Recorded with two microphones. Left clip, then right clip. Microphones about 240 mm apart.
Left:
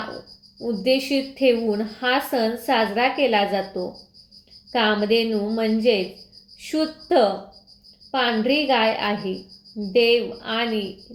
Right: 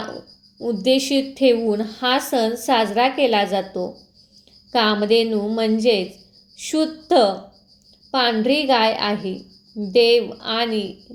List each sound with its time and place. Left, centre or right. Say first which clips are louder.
0.6 s a woman's voice: right 3 dB; right
6.7 s a woman's voice: right 3 dB; right